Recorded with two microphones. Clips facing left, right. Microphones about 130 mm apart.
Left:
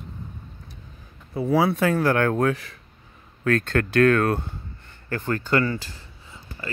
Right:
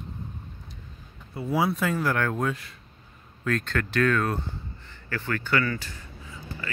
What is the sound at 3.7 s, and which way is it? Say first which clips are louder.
Speech: left 6 dB; 50° left (ahead or behind).